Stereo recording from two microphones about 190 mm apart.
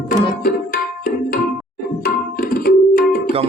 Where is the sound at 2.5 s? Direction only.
50° left (ahead or behind).